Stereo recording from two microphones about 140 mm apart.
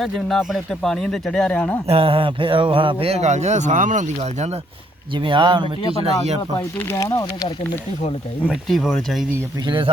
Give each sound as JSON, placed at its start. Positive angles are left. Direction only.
{"t": 0.0, "sound": "speech", "side_deg": 0}
{"t": 1.9, "sound": "speech", "side_deg": -40}
{"t": 5.1, "sound": "speech", "side_deg": -35}
{"t": 6.6, "sound": "speech", "side_deg": 15}
{"t": 8.4, "sound": "speech", "side_deg": 0}
{"t": 9.6, "sound": "speech", "side_deg": -35}